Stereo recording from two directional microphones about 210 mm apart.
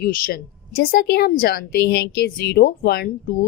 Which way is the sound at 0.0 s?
45° left (ahead or behind).